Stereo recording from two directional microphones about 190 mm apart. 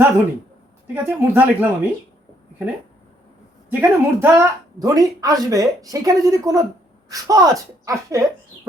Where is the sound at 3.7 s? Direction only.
10° right (ahead or behind).